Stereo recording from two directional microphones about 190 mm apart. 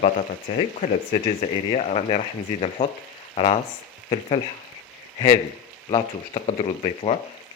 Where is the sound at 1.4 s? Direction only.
35° left (ahead or behind).